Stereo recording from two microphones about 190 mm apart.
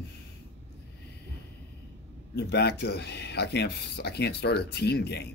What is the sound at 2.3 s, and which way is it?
Speech, 60° left (ahead or behind).